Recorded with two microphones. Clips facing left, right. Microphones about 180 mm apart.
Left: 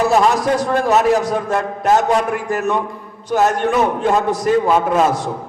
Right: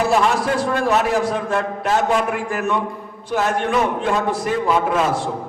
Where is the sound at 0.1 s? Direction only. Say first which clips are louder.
Left 3 dB; 40° left (ahead or behind).